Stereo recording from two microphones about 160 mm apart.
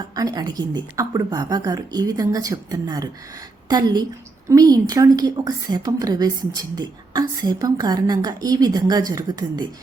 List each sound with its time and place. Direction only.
0.2 s a woman's voice: 25° right (ahead or behind)